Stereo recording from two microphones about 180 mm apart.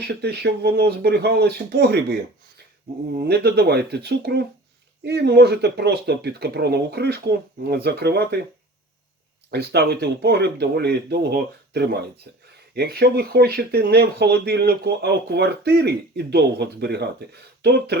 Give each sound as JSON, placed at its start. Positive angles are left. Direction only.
{"t": 0.0, "sound": "speech", "side_deg": -65}
{"t": 3.2, "sound": "speech", "side_deg": -65}
{"t": 9.5, "sound": "speech", "side_deg": -65}